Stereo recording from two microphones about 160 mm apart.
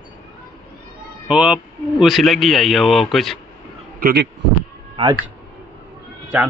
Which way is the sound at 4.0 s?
65° right (ahead or behind).